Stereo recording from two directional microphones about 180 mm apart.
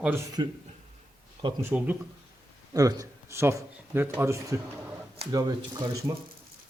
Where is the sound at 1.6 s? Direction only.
10° right (ahead or behind).